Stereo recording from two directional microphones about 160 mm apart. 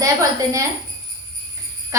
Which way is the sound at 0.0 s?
20° right (ahead or behind).